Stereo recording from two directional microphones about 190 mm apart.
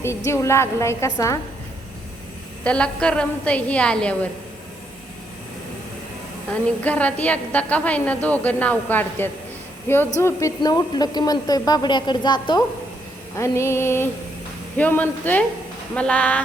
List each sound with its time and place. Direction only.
0.3 s a woman's voice: 15° left (ahead or behind)
2.6 s a woman's voice: 5° left (ahead or behind)
6.5 s a woman's voice: 5° left (ahead or behind)